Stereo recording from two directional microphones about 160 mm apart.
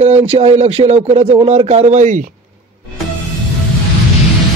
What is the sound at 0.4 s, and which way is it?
Speech, 40° right (ahead or behind).